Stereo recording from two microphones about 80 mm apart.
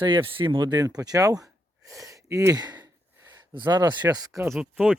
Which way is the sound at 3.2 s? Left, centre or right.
Right.